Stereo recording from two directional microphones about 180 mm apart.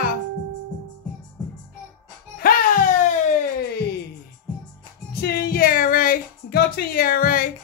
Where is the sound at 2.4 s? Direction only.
50° left (ahead or behind).